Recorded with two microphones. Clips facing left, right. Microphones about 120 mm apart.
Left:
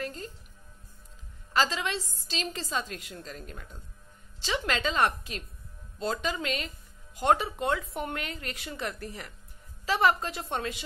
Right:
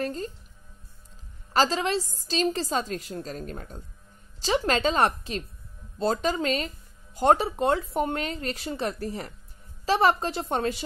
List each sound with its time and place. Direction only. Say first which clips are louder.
0.0 s speech: right 6 dB; 35° right (ahead or behind)
1.5 s a woman's voice: right 5 dB; 35° right (ahead or behind)